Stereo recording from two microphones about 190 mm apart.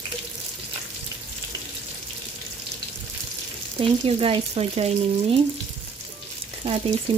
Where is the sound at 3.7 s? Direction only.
30° right (ahead or behind).